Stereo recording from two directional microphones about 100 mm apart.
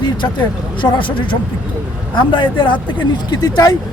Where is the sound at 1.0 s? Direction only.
55° left (ahead or behind).